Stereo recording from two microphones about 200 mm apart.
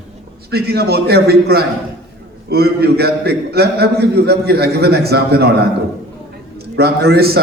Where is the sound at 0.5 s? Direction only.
50° right (ahead or behind).